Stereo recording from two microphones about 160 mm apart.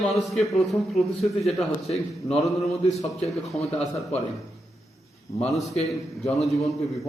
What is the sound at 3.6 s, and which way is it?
Speech, 40° left (ahead or behind).